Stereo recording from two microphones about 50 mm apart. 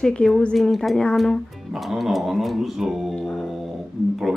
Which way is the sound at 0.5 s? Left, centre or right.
Centre.